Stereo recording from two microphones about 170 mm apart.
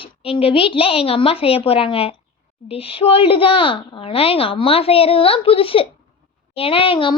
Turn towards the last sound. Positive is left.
turn(degrees=30)  # may be behind; listen again after turning